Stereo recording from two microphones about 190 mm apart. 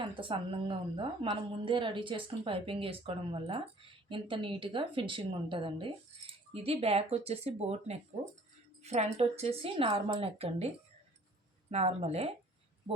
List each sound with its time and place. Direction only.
0.0 s speech: 25° right (ahead or behind)
11.7 s speech: 35° right (ahead or behind)